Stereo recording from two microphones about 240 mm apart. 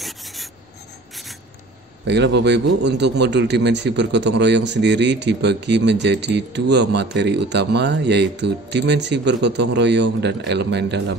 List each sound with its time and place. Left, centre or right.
0.0 s rub: centre
2.0 s a man's voice: right